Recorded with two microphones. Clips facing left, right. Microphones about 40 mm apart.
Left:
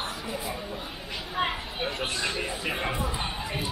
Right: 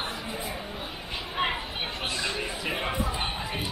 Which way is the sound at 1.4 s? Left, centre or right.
Right.